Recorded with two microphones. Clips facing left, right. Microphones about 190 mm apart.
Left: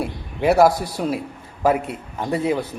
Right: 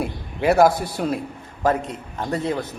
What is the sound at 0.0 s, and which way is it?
A man's voice, centre (ahead or behind).